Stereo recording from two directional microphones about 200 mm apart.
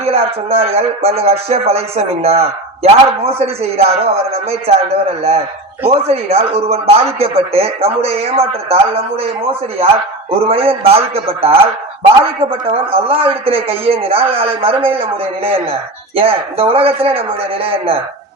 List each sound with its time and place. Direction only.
0.0 s speech: 30° right (ahead or behind)
5.9 s a man's voice: 30° right (ahead or behind)